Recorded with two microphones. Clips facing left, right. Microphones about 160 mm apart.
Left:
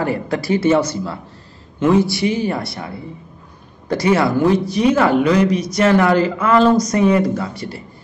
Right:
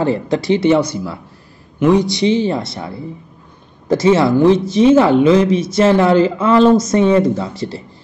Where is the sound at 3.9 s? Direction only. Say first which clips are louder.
Right 4 dB; 25° right (ahead or behind).